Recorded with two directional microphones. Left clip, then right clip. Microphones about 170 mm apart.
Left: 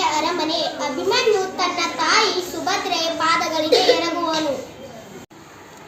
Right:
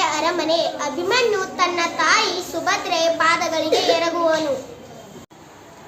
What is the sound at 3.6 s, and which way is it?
Child singing, 5° right (ahead or behind).